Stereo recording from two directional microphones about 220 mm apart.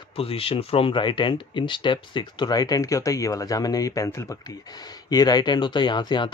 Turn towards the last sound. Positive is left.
turn(degrees=20)  # may be behind; listen again after turning